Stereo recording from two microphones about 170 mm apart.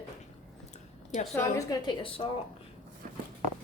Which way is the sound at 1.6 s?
25° left (ahead or behind).